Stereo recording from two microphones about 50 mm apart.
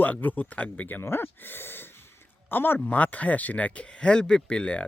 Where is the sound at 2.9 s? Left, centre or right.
Left.